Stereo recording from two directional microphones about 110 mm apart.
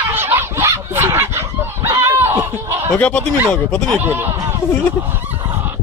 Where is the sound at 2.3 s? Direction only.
20° right (ahead or behind).